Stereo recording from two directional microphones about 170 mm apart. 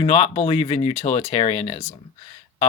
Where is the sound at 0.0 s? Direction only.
40° left (ahead or behind).